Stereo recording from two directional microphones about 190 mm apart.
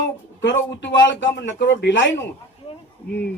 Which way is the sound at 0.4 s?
70° left (ahead or behind).